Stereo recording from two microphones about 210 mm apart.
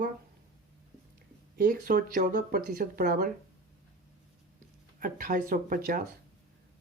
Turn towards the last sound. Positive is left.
turn(degrees=-40)  # may be behind; listen again after turning